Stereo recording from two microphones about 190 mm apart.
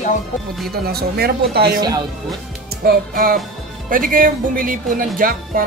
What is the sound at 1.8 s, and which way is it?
Music, 20° right (ahead or behind).